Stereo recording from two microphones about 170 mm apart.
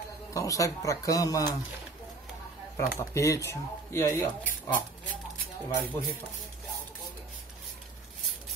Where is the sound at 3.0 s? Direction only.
20° left (ahead or behind).